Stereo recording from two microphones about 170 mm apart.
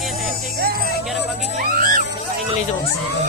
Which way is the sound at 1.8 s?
55° right (ahead or behind).